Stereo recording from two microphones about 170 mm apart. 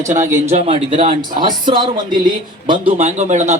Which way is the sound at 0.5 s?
35° right (ahead or behind).